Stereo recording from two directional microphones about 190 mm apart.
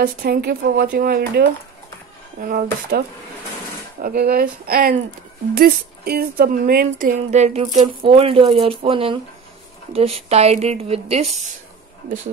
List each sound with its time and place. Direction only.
0.0 s speech: 55° right (ahead or behind)
4.0 s speech: 50° right (ahead or behind); by 11.2 s 30° right (ahead or behind)